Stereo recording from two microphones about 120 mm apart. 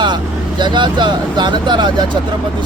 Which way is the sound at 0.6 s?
40° right (ahead or behind).